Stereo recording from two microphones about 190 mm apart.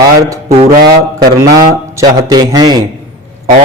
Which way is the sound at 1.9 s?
20° right (ahead or behind).